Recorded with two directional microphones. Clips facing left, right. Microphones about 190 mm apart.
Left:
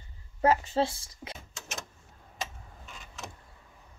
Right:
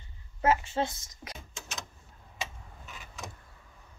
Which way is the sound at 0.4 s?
35° left (ahead or behind).